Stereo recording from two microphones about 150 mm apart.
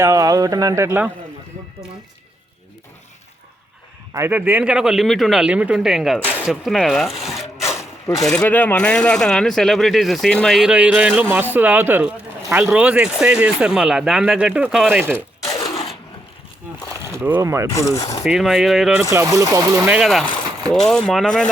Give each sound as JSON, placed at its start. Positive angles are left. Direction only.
{"t": 0.0, "sound": "speech", "side_deg": -20}
{"t": 4.1, "sound": "speech", "side_deg": -15}
{"t": 6.1, "sound": "speech", "side_deg": 15}
{"t": 6.5, "sound": "speech", "side_deg": 0}
{"t": 7.6, "sound": "wood", "side_deg": 20}
{"t": 8.3, "sound": "speech", "side_deg": 10}
{"t": 15.4, "sound": "a sound", "side_deg": 25}
{"t": 17.2, "sound": "speech", "side_deg": -15}
{"t": 18.2, "sound": "speech", "side_deg": -5}
{"t": 19.1, "sound": "speech", "side_deg": -20}
{"t": 19.9, "sound": "speech", "side_deg": 0}